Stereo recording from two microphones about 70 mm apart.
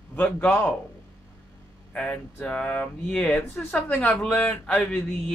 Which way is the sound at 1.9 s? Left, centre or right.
Centre.